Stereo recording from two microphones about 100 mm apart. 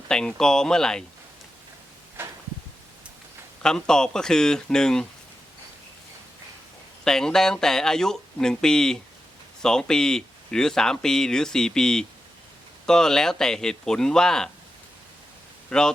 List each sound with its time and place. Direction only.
0.1 s speech: 5° left (ahead or behind)
2.2 s a sound: 20° right (ahead or behind)
3.6 s speech: 5° left (ahead or behind)
7.0 s a man's voice: 5° left (ahead or behind)
15.7 s speech: 10° left (ahead or behind)